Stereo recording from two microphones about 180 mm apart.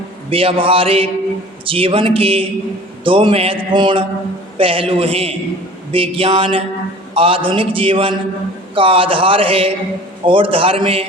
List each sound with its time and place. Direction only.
0.3 s a man's voice: 30° right (ahead or behind)